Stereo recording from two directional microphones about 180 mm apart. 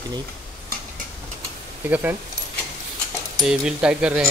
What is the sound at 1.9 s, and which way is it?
Speech, 10° right (ahead or behind).